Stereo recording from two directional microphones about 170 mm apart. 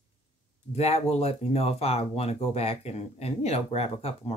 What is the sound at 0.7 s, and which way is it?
Speech, 35° left (ahead or behind).